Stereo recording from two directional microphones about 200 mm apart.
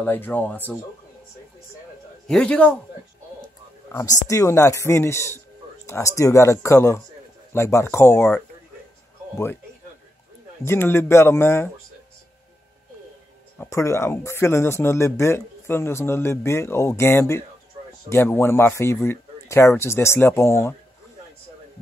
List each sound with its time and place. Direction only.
0.0 s speech: 10° left (ahead or behind)
2.2 s a man's voice: 5° left (ahead or behind)
3.9 s speech: 15° left (ahead or behind)
10.6 s speech: 10° left (ahead or behind)
13.6 s speech: 15° left (ahead or behind)